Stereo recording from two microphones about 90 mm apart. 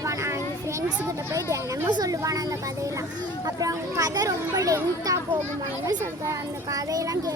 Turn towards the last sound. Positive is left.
turn(degrees=-40)  # may be behind; listen again after turning